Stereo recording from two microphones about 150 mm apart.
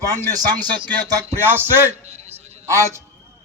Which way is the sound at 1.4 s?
15° right (ahead or behind).